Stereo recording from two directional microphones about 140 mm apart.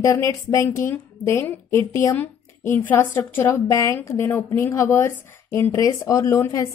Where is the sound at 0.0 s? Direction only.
20° left (ahead or behind).